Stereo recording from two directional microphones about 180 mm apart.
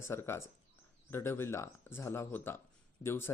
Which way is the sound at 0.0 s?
15° left (ahead or behind).